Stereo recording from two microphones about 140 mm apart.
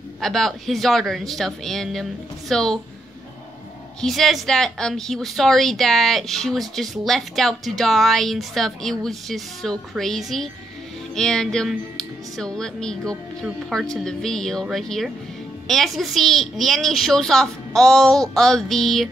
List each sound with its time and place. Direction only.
0.2 s speech: centre (ahead or behind)
4.0 s speech: centre (ahead or behind)